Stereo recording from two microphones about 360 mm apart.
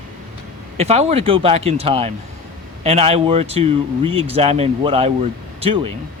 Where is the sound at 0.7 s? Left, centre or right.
Centre.